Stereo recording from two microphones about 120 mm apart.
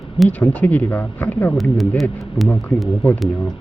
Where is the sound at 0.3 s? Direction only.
10° left (ahead or behind).